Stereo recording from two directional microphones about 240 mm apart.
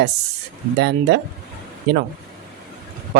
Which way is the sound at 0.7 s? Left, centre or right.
Right.